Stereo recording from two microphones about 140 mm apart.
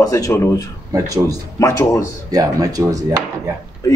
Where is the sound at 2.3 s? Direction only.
25° right (ahead or behind).